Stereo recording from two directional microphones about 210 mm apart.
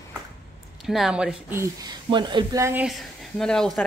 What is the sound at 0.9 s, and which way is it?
Speech, centre (ahead or behind).